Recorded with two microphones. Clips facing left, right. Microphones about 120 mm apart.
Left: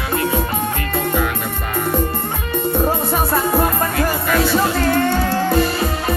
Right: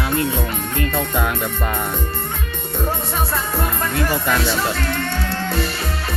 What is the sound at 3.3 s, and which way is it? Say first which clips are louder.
Music: left 6 dB; 60° left (ahead or behind).